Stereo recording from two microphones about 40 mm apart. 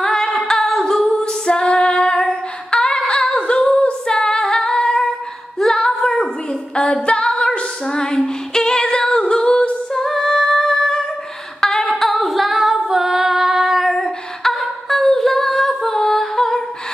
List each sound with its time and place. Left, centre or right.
0.0 s singing: centre
0.5 s female singing: centre
3.1 s singing: left
5.8 s female singing: centre
9.2 s a capella: left
9.9 s humming: centre
11.6 s female singing: centre
14.5 s a sound: centre